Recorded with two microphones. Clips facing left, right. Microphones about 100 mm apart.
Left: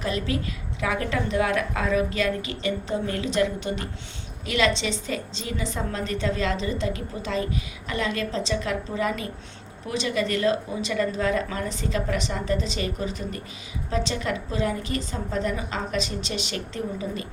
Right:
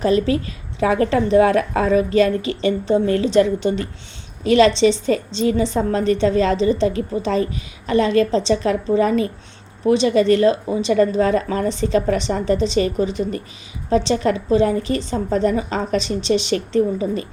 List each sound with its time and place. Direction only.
0.0 s a woman's voice: 30° right (ahead or behind)